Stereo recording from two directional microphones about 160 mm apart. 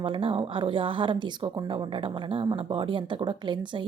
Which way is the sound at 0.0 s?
35° right (ahead or behind).